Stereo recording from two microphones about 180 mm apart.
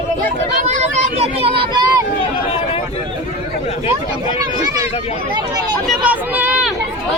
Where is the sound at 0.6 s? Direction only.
40° right (ahead or behind); by 2.0 s 20° right (ahead or behind).